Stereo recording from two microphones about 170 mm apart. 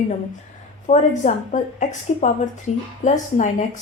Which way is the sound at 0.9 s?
45° left (ahead or behind).